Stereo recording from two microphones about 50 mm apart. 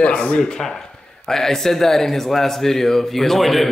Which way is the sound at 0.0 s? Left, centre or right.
Left.